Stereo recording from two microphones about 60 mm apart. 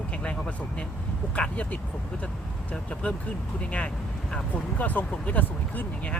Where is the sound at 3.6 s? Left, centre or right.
Left.